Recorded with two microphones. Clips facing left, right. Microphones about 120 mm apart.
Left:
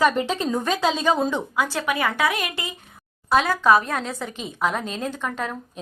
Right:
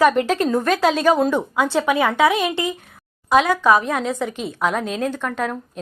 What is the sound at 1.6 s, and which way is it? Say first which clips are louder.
Speech: right 7 dB; 25° right (ahead or behind).